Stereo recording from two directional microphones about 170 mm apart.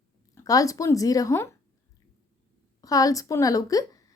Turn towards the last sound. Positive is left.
turn(degrees=20)  # may be behind; listen again after turning